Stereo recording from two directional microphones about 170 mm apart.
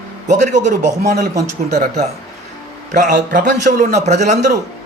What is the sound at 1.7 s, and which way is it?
A man's voice, 45° right (ahead or behind).